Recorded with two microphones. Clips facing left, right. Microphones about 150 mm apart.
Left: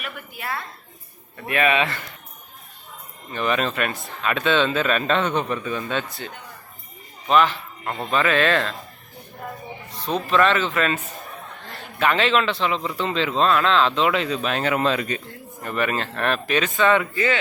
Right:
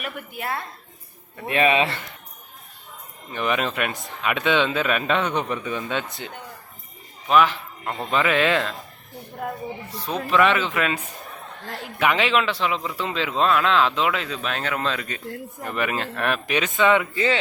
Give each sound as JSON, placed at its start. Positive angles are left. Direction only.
{"t": 1.5, "sound": "a man's voice", "side_deg": -30}
{"t": 3.3, "sound": "a man's voice", "side_deg": -15}
{"t": 7.3, "sound": "a man's voice", "side_deg": -5}
{"t": 10.2, "sound": "a man's voice", "side_deg": -10}
{"t": 15.6, "sound": "a man's voice", "side_deg": -15}